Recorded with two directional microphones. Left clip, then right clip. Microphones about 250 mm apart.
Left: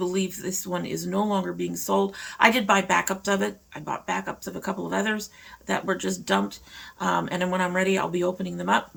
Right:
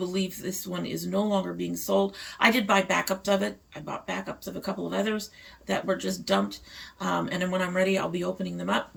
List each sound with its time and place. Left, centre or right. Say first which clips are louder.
0.0 s speech: left 3 dB; centre